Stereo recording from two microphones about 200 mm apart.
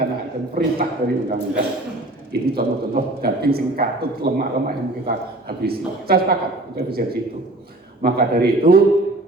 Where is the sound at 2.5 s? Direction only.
50° right (ahead or behind).